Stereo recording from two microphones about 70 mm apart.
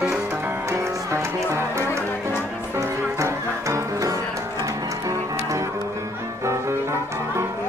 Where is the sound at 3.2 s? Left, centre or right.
Right.